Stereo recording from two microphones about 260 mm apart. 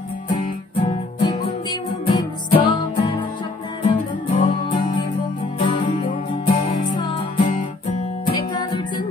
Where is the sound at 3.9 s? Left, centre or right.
Centre.